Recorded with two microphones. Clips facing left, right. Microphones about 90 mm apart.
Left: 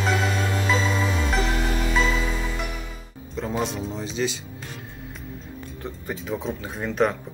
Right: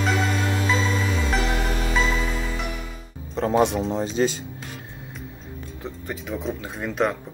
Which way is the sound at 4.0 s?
45° right (ahead or behind).